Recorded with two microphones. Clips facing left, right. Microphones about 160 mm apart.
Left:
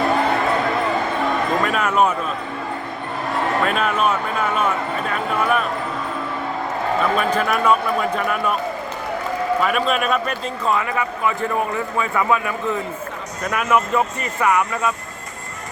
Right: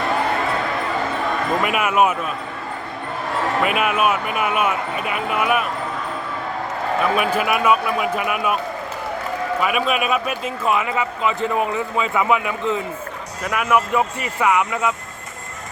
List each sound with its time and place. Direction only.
1.6 s speech: 10° right (ahead or behind)
3.6 s speech: 10° right (ahead or behind)
7.2 s speech: 10° right (ahead or behind)
9.6 s speech: 5° right (ahead or behind)
10.8 s a man's voice: 20° right (ahead or behind)
13.4 s speech: 5° right (ahead or behind)